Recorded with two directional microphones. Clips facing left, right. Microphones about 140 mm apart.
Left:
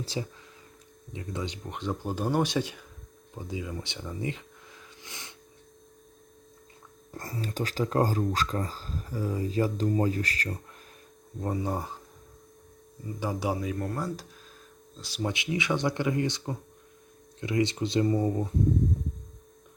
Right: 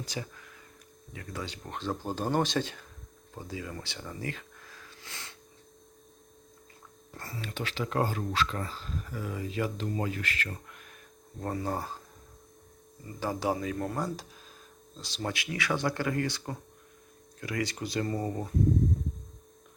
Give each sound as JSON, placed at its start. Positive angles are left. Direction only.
{"t": 0.0, "sound": "speech", "side_deg": 30}
{"t": 4.2, "sound": "a sound", "side_deg": 20}
{"t": 7.1, "sound": "speech", "side_deg": 40}
{"t": 11.3, "sound": "speech", "side_deg": 10}
{"t": 13.1, "sound": "speech", "side_deg": 10}
{"t": 15.3, "sound": "speech", "side_deg": 20}